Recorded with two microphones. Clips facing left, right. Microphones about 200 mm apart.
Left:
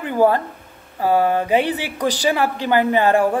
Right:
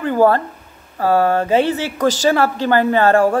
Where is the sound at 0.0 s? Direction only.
15° left (ahead or behind).